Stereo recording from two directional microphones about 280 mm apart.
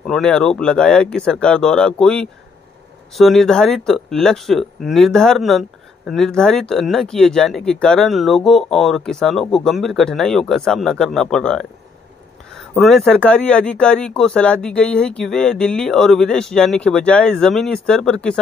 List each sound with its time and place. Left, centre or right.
0.0 s speech: centre
12.7 s speech: centre